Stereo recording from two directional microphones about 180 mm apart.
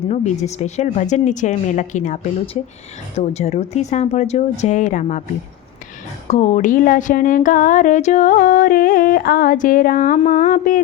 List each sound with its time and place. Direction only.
0.1 s speech: 40° left (ahead or behind)
6.2 s speech: 40° left (ahead or behind)